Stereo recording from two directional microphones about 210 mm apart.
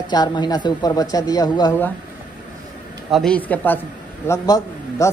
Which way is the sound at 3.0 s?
Centre (ahead or behind).